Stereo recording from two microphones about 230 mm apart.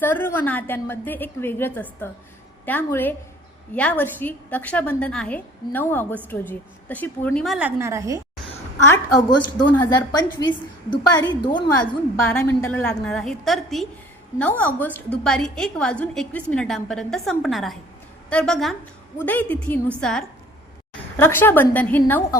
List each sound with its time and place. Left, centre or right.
0.0 s a woman's voice: centre
8.9 s a woman's voice: centre
11.4 s a woman's voice: left
12.2 s a woman's voice: centre